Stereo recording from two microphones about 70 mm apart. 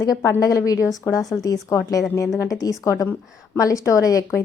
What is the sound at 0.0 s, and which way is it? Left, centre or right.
A woman's voice, left.